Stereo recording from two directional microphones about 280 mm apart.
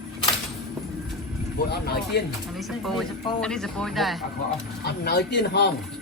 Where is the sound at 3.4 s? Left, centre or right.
Centre.